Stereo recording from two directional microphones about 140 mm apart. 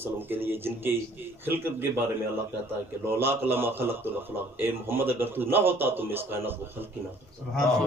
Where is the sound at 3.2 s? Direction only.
15° right (ahead or behind).